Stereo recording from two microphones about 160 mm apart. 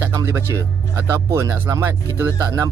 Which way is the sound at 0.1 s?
15° right (ahead or behind).